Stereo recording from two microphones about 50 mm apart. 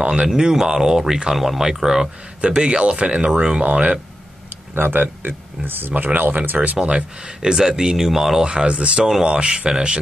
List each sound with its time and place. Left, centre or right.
0.0 s speech: right
0.3 s speech: centre
2.4 s speech: centre
4.7 s speech: right
6.8 s speech: right
8.5 s speech: centre